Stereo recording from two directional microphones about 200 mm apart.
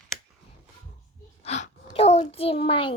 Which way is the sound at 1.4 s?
35° left (ahead or behind).